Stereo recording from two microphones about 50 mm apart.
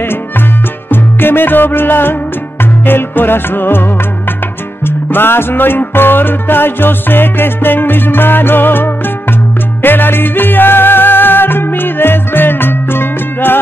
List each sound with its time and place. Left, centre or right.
0.8 s music: left
4.8 s music: left